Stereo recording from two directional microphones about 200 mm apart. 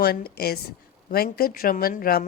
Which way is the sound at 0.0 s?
50° left (ahead or behind).